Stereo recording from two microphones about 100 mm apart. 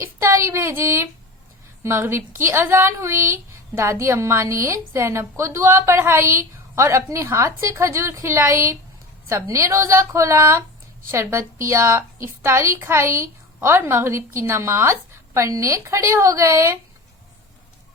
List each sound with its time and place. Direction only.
0.0 s a woman's voice: 25° right (ahead or behind)